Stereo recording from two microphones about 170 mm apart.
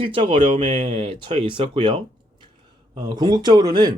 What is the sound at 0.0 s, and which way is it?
Speech, 30° right (ahead or behind).